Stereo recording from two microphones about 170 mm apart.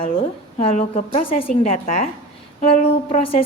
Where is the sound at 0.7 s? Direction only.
40° left (ahead or behind).